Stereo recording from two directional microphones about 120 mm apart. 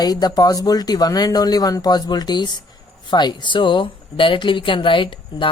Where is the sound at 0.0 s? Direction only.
35° left (ahead or behind).